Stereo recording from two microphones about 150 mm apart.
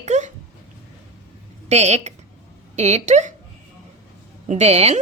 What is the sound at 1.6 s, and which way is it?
A woman's voice, 45° right (ahead or behind).